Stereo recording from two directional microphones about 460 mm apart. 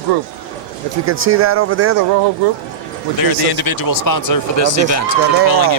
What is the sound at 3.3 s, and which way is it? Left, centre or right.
Speech, left.